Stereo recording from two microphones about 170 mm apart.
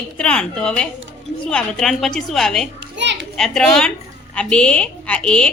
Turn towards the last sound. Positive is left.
turn(degrees=5)  # may be behind; listen again after turning